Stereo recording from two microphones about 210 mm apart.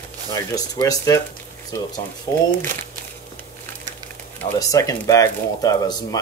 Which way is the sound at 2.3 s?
15° left (ahead or behind).